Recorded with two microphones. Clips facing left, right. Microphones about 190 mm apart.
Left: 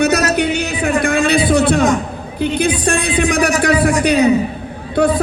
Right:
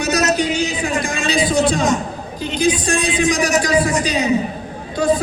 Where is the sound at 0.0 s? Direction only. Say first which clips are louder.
Left 3 dB; 60° left (ahead or behind).